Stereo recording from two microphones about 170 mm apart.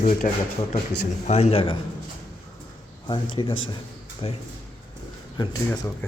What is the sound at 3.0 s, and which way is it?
A man's voice, 30° left (ahead or behind).